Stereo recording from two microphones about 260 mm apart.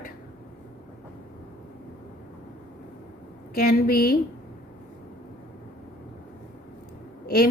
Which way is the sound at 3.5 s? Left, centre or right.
Left.